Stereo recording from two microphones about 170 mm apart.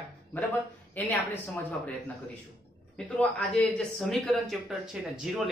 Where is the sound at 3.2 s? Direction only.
5° left (ahead or behind).